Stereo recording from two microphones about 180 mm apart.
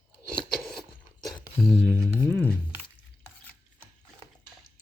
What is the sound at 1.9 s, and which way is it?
Speech, 5° left (ahead or behind).